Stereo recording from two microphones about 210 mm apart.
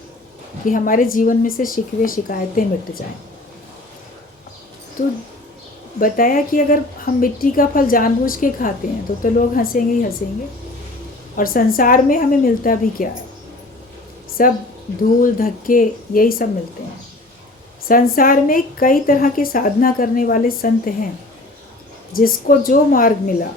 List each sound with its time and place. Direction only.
0.6 s a woman's voice: 40° left (ahead or behind)
6.0 s a woman's voice: 40° left (ahead or behind)
11.3 s a woman's voice: 45° left (ahead or behind)
14.4 s a woman's voice: 40° left (ahead or behind)
17.8 s a woman's voice: 40° left (ahead or behind)
22.1 s a woman's voice: 45° left (ahead or behind)